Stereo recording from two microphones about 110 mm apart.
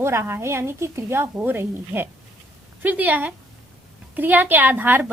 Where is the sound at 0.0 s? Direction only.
25° right (ahead or behind).